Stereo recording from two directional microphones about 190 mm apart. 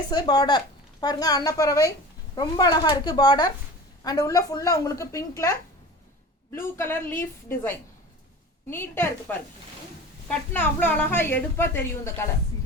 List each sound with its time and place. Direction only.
0.1 s a woman's voice: 20° left (ahead or behind)
8.7 s a woman's voice: 10° left (ahead or behind)